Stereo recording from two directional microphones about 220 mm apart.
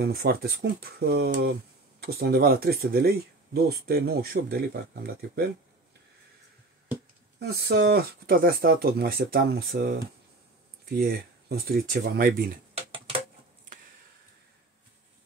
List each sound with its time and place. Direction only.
0.0 s speech: 45° right (ahead or behind)
7.3 s speech: 50° right (ahead or behind)